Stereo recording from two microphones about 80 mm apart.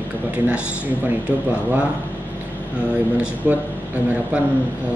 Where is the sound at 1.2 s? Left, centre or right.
Centre.